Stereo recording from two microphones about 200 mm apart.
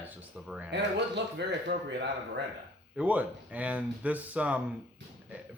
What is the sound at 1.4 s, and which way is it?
Speech, 60° right (ahead or behind).